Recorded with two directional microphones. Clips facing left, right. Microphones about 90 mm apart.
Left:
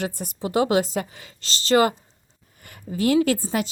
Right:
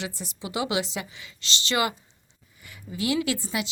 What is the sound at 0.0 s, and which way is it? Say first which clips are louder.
A woman's voice: left 7 dB; 50° left (ahead or behind).